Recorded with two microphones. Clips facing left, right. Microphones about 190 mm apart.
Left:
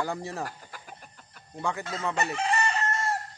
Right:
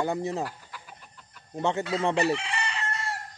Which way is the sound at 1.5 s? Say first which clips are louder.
Right 5 dB; 25° right (ahead or behind).